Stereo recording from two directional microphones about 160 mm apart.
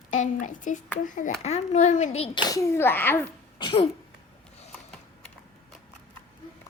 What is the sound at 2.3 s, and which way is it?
Speech, 25° left (ahead or behind).